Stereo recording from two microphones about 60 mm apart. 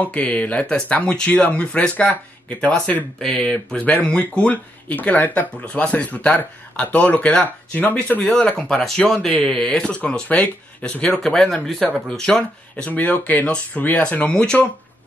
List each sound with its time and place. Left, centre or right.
0.1 s speech: left
3.2 s speech: centre
14.3 s speech: centre